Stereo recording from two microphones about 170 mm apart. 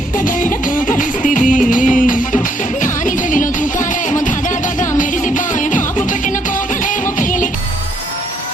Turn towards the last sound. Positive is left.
turn(degrees=50)  # may be behind; listen again after turning